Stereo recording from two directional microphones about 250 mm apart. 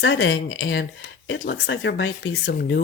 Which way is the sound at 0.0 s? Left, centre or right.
Left.